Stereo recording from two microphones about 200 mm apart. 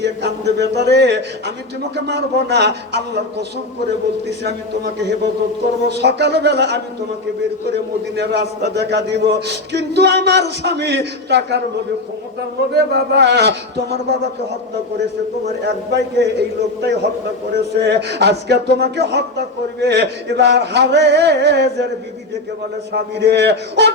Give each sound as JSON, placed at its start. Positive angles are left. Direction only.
{"t": 0.0, "sound": "speech", "side_deg": -55}
{"t": 12.7, "sound": "speech", "side_deg": -55}
{"t": 15.6, "sound": "speech", "side_deg": -60}
{"t": 22.9, "sound": "speech", "side_deg": -55}